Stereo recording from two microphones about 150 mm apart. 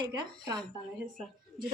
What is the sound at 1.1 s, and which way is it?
Speech, centre (ahead or behind).